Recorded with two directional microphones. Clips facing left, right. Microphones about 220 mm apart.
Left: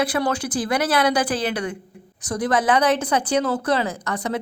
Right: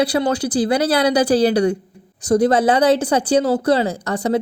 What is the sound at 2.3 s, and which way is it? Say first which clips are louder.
Speech: right 6 dB; 25° right (ahead or behind).